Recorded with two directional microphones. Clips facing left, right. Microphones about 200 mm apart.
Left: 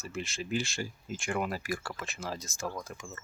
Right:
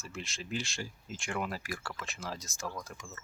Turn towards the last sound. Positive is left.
turn(degrees=0)  # may be behind; listen again after turning